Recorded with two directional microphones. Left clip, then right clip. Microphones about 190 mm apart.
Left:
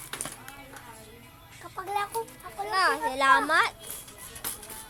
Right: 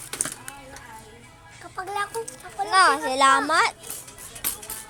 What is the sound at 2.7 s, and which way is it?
A child's voice, 20° right (ahead or behind).